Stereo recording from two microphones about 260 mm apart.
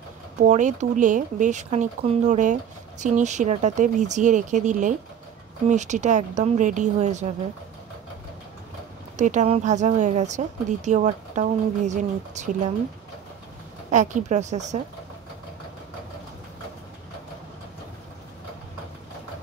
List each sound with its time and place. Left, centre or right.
0.4 s speech: right
9.1 s speech: right
13.8 s speech: right